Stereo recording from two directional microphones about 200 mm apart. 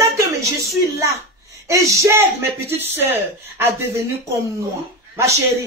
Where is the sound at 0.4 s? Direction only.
15° right (ahead or behind).